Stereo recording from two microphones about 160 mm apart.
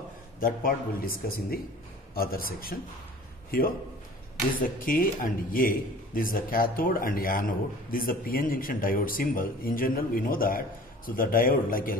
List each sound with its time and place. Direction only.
0.4 s a man's voice: 60° left (ahead or behind)
4.6 s a man's voice: 60° left (ahead or behind)